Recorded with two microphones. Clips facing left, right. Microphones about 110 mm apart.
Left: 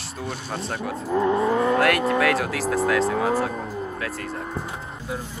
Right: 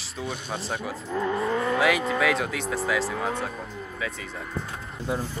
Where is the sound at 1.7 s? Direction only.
Centre (ahead or behind).